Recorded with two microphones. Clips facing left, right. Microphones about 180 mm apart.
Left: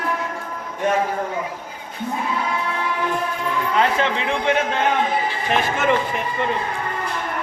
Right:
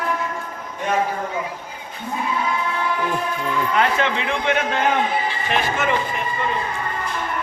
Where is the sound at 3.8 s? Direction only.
30° left (ahead or behind).